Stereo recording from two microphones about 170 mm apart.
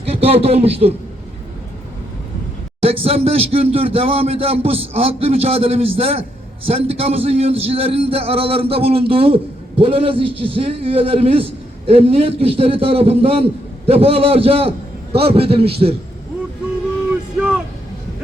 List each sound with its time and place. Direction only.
0.0 s a man's voice: 35° right (ahead or behind)
2.8 s a man's voice: 35° right (ahead or behind)